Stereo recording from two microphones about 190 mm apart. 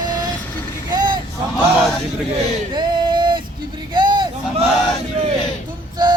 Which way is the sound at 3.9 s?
25° right (ahead or behind).